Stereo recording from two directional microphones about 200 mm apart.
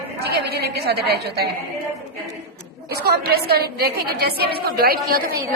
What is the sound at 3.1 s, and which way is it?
A woman's voice, 50° right (ahead or behind).